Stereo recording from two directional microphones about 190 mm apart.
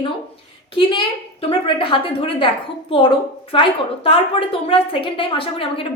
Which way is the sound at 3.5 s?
30° left (ahead or behind).